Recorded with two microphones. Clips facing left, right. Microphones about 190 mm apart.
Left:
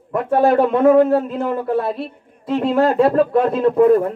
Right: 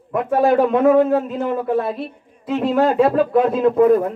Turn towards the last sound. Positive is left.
turn(degrees=0)  # may be behind; listen again after turning